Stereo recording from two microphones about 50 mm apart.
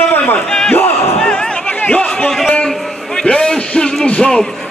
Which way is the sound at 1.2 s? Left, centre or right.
Centre.